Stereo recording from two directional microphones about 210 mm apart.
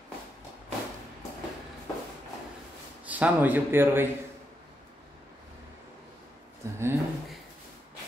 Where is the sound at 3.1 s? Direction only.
10° right (ahead or behind).